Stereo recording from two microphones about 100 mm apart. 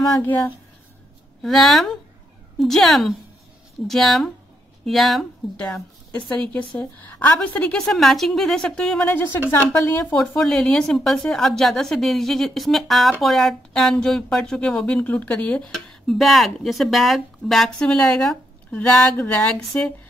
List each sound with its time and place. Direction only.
0.2 s a woman's voice: 20° left (ahead or behind)
1.4 s a woman's voice: centre (ahead or behind)
9.0 s a woman's voice: 20° left (ahead or behind)
10.1 s a woman's voice: 5° left (ahead or behind)
15.9 s speech: centre (ahead or behind)